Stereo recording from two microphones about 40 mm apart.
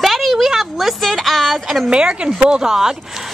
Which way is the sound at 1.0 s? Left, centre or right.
Centre.